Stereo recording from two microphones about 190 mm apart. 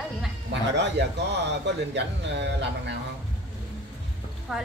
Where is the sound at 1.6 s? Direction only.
65° right (ahead or behind).